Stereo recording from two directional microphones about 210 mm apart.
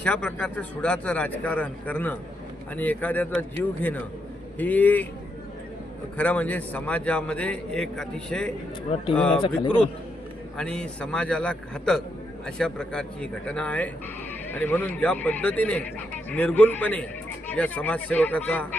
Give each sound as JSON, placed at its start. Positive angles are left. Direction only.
{"t": 0.0, "sound": "speech", "side_deg": 5}
{"t": 6.1, "sound": "a man's voice", "side_deg": 5}
{"t": 10.6, "sound": "a man's voice", "side_deg": 5}